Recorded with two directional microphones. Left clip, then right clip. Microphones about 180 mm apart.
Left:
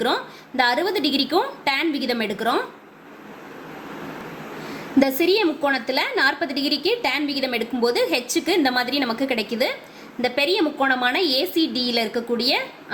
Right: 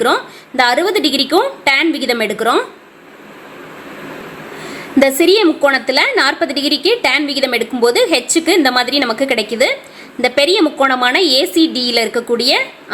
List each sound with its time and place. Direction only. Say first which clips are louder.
0.0 s a woman's voice: right 9 dB; 40° right (ahead or behind)
4.9 s a woman's voice: right 8 dB; 40° right (ahead or behind)